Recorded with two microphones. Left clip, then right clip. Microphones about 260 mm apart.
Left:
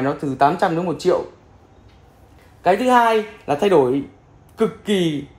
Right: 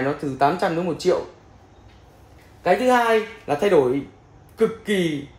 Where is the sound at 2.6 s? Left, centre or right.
Left.